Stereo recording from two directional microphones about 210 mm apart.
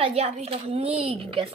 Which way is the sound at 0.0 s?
30° right (ahead or behind).